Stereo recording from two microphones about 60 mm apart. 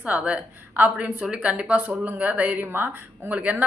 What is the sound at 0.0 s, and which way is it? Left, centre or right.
Speech, right.